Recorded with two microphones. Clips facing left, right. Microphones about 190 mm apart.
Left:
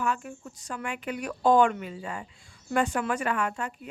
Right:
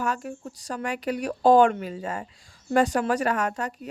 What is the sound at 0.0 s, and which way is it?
A woman's voice, 40° right (ahead or behind).